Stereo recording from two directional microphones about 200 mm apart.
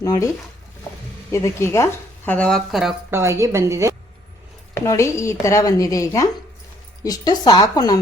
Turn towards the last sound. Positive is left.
turn(degrees=20)  # may be behind; listen again after turning